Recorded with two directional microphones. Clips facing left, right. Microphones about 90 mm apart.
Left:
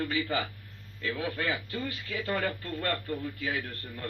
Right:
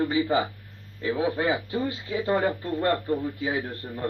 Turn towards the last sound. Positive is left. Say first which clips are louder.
# right 7 dB
turn(degrees=-20)  # may be behind; listen again after turning